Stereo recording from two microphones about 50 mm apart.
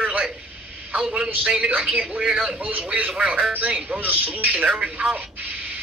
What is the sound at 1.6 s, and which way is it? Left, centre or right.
A man's voice, right.